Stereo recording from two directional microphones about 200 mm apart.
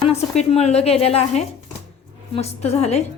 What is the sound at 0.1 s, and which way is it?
A woman's voice, 30° left (ahead or behind).